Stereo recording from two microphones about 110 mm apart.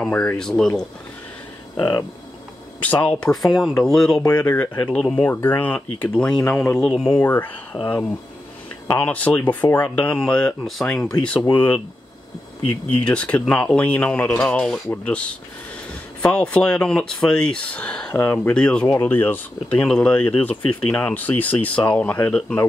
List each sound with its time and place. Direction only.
0.0 s speech: 15° left (ahead or behind)
1.8 s speech: 35° left (ahead or behind)
2.8 s speech: 15° left (ahead or behind)
7.2 s speech: 15° left (ahead or behind)
11.5 s speech: 15° left (ahead or behind)
13.0 s speech: 10° left (ahead or behind)